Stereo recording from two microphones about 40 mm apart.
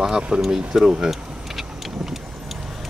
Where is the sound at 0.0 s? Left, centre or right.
Centre.